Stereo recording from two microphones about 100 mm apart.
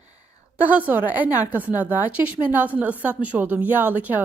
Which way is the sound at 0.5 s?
15° right (ahead or behind).